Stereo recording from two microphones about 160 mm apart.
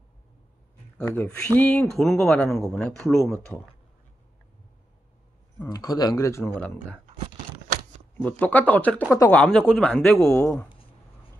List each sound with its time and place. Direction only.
0.9 s speech: 10° left (ahead or behind)
5.7 s speech: 25° left (ahead or behind)
8.2 s speech: 10° left (ahead or behind)
10.2 s speech: 15° left (ahead or behind)